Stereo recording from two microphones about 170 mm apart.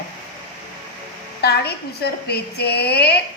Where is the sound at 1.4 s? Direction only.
70° left (ahead or behind).